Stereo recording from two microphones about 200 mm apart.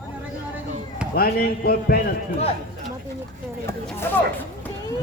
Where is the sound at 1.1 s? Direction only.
50° left (ahead or behind).